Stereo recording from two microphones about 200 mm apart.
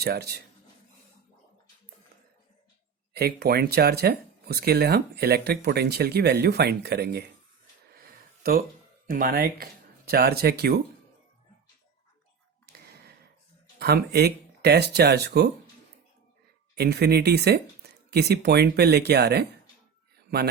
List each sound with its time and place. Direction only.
0.0 s speech: 50° right (ahead or behind)
3.1 s speech: 55° right (ahead or behind)
7.9 s a sound: 45° right (ahead or behind)
9.0 s speech: 45° right (ahead or behind)
13.7 s speech: 55° right (ahead or behind)
16.7 s speech: 55° right (ahead or behind)